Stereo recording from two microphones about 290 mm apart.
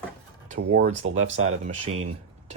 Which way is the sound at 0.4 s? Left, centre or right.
Right.